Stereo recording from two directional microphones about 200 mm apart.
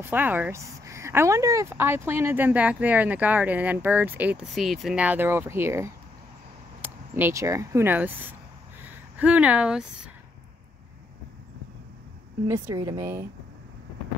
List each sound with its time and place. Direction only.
0.0 s speech: 10° right (ahead or behind)
12.4 s speech: 15° right (ahead or behind)